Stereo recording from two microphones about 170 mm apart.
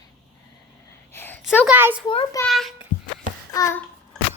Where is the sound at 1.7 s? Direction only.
10° right (ahead or behind).